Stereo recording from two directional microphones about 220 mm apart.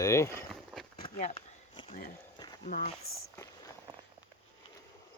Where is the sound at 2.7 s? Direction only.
40° left (ahead or behind).